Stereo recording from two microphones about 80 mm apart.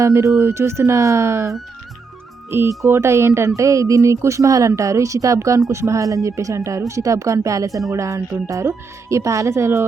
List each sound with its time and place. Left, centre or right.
0.0 s speech: right